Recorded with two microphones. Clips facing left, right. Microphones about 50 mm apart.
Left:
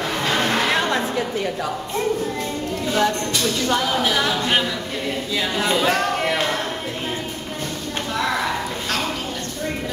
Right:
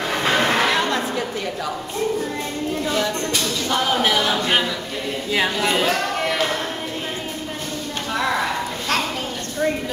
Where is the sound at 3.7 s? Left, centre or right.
Right.